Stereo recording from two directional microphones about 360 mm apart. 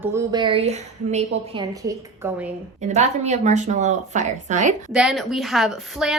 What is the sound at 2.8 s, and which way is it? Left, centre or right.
Speech, centre.